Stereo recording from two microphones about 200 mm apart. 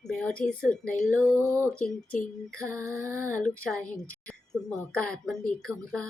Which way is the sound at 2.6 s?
15° right (ahead or behind).